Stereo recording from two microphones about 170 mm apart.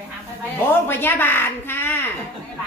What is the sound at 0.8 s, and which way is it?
A woman's voice, 10° left (ahead or behind).